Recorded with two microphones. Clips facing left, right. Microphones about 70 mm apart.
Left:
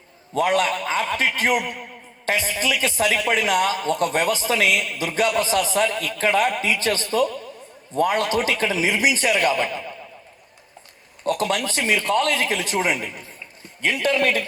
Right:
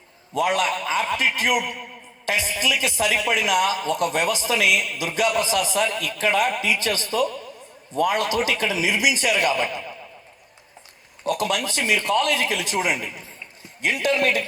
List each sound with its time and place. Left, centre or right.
0.3 s a man's voice: left
11.3 s a man's voice: left